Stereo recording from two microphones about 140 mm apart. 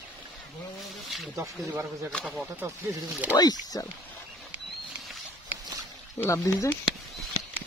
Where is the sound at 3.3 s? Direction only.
25° left (ahead or behind).